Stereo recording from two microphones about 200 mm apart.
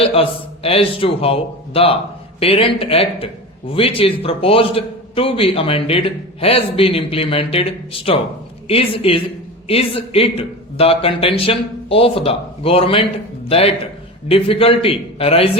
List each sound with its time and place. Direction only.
0.0 s a man's voice: 30° left (ahead or behind)